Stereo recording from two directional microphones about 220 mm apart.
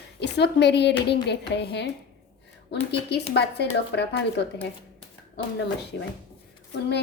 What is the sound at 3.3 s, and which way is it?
Speech, 50° left (ahead or behind).